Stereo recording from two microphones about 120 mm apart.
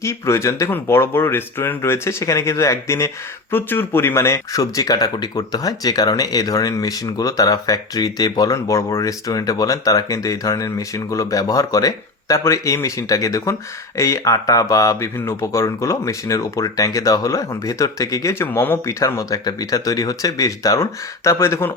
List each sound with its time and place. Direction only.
0.0 s speech: 25° left (ahead or behind)